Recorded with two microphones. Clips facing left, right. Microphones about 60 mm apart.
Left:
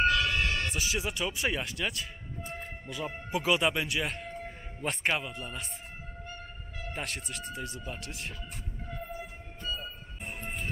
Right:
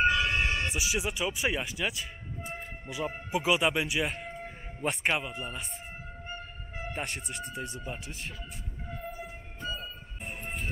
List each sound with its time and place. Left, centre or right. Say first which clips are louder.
0.0 s music: right 1 dB; centre
0.4 s speech: right 1 dB; centre
6.2 s music: right 2 dB; right
6.9 s speech: right 1 dB; centre
9.8 s train: even; centre